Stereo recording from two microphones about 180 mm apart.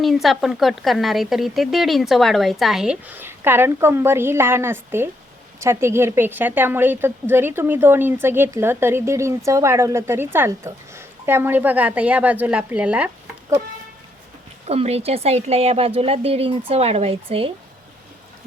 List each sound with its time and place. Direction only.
0.0 s a woman's voice: centre (ahead or behind)
14.7 s speech: 35° right (ahead or behind)